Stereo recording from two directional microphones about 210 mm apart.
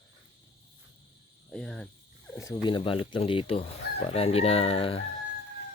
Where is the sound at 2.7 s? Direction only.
25° left (ahead or behind).